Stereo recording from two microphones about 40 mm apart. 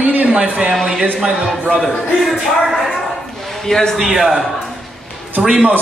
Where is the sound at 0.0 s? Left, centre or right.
Right.